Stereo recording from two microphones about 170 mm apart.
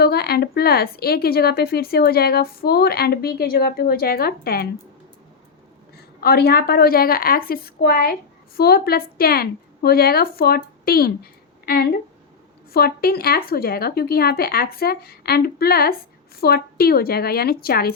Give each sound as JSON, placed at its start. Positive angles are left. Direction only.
{"t": 0.0, "sound": "a woman's voice", "side_deg": 65}
{"t": 6.1, "sound": "a woman's voice", "side_deg": 65}